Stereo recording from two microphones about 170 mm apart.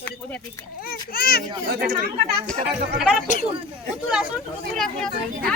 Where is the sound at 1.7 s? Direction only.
70° right (ahead or behind).